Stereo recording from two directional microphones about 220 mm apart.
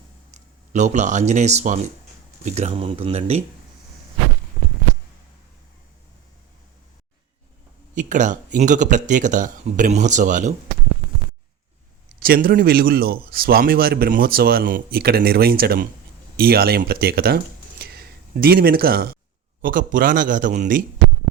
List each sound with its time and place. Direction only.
0.3 s speech: 30° right (ahead or behind)
7.9 s a man's voice: 35° right (ahead or behind)
12.2 s a man's voice: 45° right (ahead or behind)